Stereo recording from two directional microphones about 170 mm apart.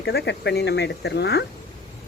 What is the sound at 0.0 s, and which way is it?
Speech, 75° left (ahead or behind).